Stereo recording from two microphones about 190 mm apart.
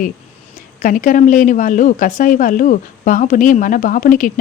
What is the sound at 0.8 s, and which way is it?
Speech, 45° left (ahead or behind).